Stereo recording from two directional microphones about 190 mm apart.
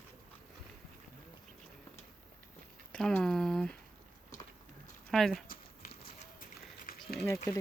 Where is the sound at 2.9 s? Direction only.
5° left (ahead or behind).